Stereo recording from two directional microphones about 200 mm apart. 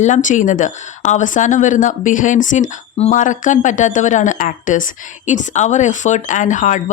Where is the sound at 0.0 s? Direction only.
40° left (ahead or behind).